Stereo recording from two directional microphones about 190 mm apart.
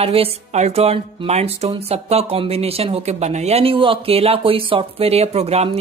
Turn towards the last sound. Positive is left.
turn(degrees=-35)  # may be behind; listen again after turning